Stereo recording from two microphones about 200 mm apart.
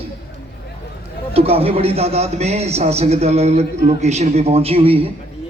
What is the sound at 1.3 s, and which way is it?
A man's voice, 30° right (ahead or behind).